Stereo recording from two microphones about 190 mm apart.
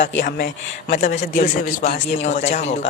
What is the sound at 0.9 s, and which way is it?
A man's voice, 45° left (ahead or behind).